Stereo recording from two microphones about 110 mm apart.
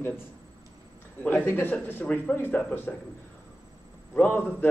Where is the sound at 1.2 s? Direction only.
15° left (ahead or behind).